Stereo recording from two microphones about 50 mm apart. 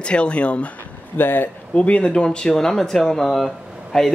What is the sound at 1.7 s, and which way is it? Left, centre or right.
A man's voice, left.